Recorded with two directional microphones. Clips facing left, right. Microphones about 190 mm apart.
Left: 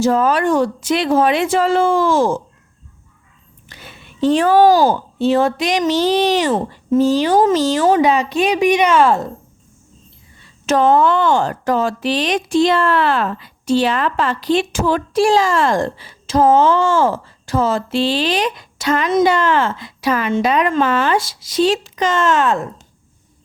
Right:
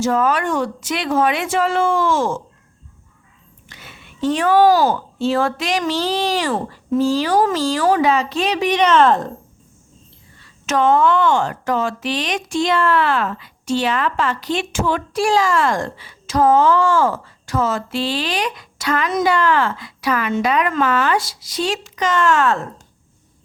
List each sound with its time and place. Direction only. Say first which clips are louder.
0.0 s speech: left 3 dB; 30° left (ahead or behind)
3.7 s speech: left 3 dB; 35° left (ahead or behind); by 9.3 s 10° left (ahead or behind)
10.7 s speech: left 2 dB; 35° left (ahead or behind); by 22.6 s 20° left (ahead or behind)